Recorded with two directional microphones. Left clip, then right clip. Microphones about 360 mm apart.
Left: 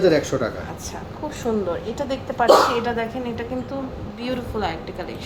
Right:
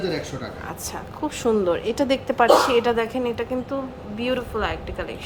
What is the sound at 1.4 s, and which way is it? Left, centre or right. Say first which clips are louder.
A woman's voice: right 3 dB; right.